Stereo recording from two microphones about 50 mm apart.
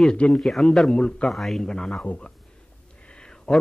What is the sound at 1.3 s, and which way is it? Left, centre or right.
Speech, centre.